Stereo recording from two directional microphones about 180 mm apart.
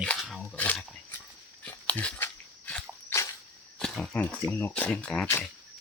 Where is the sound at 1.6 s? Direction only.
10° left (ahead or behind).